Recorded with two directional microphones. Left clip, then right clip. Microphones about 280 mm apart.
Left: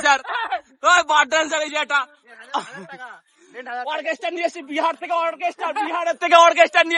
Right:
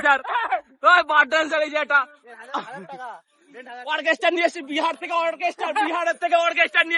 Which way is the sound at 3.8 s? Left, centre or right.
Centre.